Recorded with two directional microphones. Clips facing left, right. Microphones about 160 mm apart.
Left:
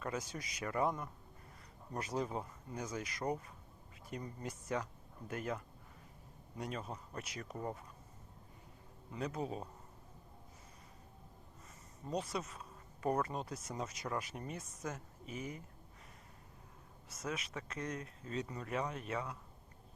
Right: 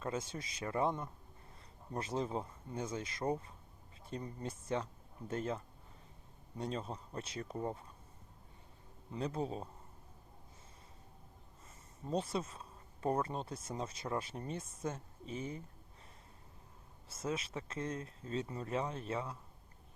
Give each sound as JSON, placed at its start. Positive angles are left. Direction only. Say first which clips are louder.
{"t": 0.0, "sound": "speech", "louder": "right 2 dB", "side_deg": -25}
{"t": 9.1, "sound": "speech", "louder": "right 2 dB", "side_deg": -30}
{"t": 12.1, "sound": "speech", "louder": "right 3 dB", "side_deg": -30}
{"t": 17.1, "sound": "speech", "louder": "right 3 dB", "side_deg": -30}